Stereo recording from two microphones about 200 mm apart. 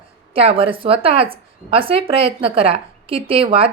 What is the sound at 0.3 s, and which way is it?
Speech, 25° right (ahead or behind).